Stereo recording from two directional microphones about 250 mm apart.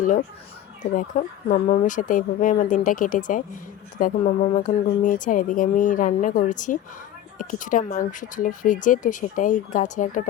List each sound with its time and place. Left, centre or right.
0.0 s speech: left